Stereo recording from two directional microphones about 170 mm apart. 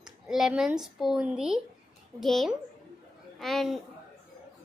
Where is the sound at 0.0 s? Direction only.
5° right (ahead or behind).